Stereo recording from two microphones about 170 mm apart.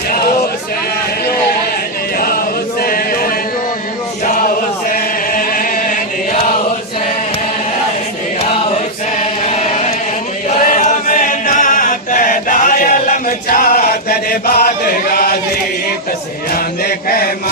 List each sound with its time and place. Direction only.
2.8 s chant: 60° left (ahead or behind)
9.5 s chant: 40° left (ahead or behind); by 15.3 s 60° left (ahead or behind)